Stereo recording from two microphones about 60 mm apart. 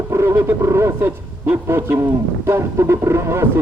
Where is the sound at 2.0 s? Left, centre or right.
Right.